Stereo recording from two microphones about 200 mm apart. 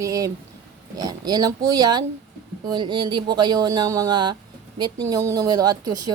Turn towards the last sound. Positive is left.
turn(degrees=-20)  # may be behind; listen again after turning